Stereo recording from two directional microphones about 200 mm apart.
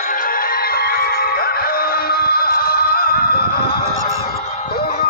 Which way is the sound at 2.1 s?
50° left (ahead or behind).